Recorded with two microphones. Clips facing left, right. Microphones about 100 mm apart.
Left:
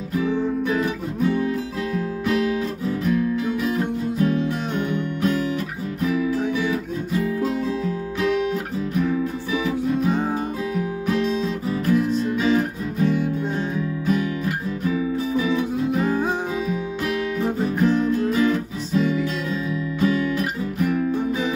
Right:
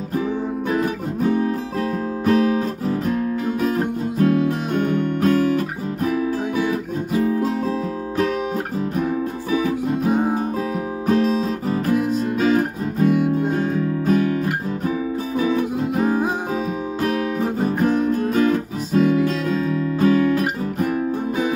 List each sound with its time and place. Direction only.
0.1 s music: 40° right (ahead or behind)
2.2 s guitar: 45° right (ahead or behind)
8.9 s music: 45° right (ahead or behind)
11.1 s music: 45° right (ahead or behind)